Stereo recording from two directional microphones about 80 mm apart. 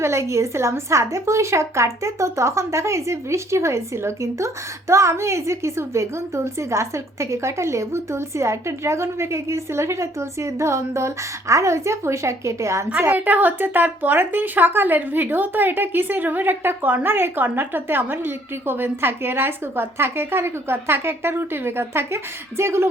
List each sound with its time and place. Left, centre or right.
0.0 s speech: right
12.9 s speech: right